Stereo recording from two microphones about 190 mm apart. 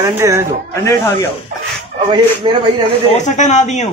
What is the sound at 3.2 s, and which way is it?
Speech, 40° left (ahead or behind).